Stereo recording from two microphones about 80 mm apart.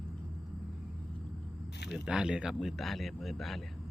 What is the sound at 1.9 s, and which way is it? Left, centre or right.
Speech, centre.